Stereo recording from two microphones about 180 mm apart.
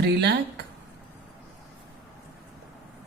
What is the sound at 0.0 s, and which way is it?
Speech, 70° right (ahead or behind).